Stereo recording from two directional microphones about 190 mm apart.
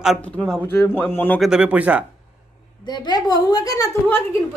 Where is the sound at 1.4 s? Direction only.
5° right (ahead or behind).